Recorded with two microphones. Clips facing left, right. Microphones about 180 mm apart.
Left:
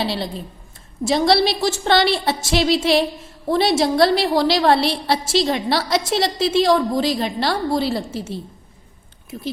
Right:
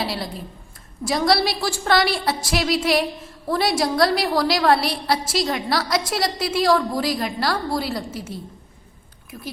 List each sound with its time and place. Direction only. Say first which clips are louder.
0.0 s a woman's voice: left 3 dB; 25° left (ahead or behind)